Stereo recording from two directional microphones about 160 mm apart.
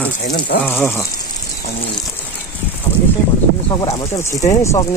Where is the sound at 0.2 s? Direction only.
90° left.